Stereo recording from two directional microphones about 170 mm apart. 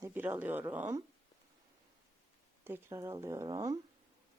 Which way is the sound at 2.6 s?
15° right (ahead or behind).